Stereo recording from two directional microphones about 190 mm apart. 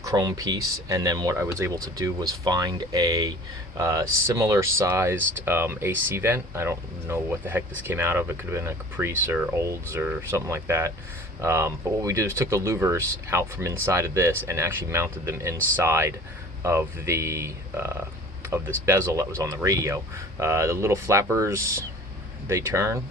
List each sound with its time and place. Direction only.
0.0 s speech: 20° right (ahead or behind)